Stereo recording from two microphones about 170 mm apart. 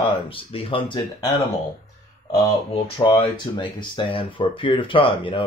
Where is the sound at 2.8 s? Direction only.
30° left (ahead or behind).